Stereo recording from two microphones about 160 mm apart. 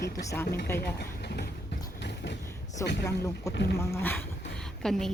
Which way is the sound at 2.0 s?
90° left.